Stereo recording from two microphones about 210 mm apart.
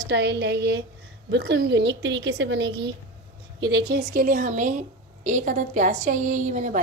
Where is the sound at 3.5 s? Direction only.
20° right (ahead or behind).